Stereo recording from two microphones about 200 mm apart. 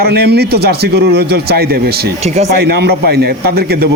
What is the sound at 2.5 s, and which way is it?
A man's voice, 50° right (ahead or behind).